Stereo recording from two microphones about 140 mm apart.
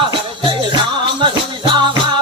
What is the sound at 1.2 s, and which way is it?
Music, 35° right (ahead or behind).